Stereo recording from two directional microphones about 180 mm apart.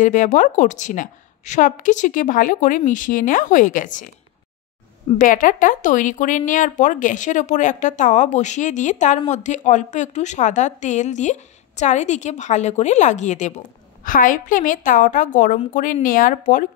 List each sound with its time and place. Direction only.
0.0 s speech: 45° left (ahead or behind)
5.2 s a woman's voice: 50° left (ahead or behind)